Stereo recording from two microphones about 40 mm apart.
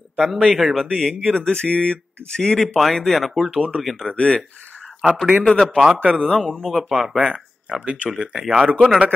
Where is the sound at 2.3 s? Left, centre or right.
Centre.